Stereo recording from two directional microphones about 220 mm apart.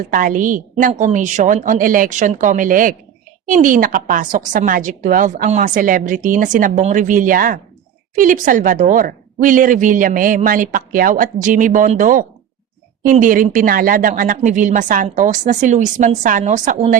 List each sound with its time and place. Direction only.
0.0 s a woman's voice: 40° right (ahead or behind)